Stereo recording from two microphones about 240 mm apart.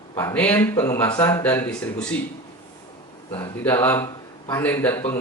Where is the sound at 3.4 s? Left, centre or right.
Centre.